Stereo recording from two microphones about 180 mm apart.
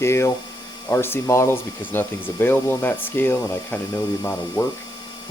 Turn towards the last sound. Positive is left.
turn(degrees=10)  # may be behind; listen again after turning